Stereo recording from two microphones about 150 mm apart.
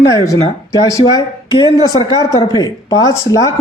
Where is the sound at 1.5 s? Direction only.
30° left (ahead or behind).